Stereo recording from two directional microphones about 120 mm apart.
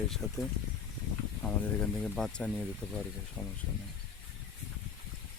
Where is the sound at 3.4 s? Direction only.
10° right (ahead or behind).